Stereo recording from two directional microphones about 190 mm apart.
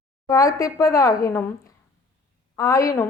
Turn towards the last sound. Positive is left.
turn(degrees=15)  # may be behind; listen again after turning